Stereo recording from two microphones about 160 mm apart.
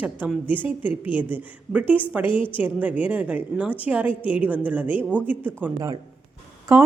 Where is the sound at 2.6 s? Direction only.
10° right (ahead or behind).